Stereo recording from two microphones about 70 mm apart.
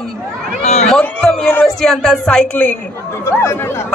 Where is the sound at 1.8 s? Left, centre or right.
Centre.